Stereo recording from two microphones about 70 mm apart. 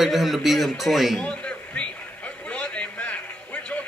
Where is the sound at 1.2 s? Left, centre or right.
Centre.